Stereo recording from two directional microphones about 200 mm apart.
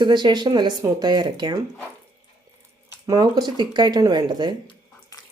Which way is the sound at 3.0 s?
20° right (ahead or behind).